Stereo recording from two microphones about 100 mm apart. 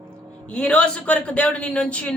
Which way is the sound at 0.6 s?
10° left (ahead or behind).